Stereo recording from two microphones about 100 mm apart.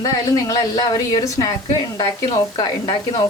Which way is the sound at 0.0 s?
35° left (ahead or behind).